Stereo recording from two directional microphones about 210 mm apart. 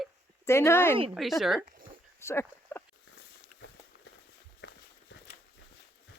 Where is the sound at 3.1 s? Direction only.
55° left (ahead or behind).